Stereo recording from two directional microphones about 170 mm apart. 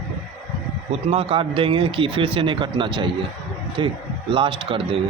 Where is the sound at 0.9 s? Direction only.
35° right (ahead or behind).